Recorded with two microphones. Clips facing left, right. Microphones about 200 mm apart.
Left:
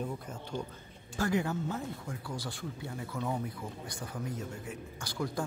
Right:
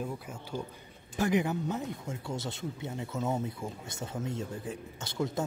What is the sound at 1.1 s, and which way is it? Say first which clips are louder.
Speech: right 3 dB; 20° right (ahead or behind).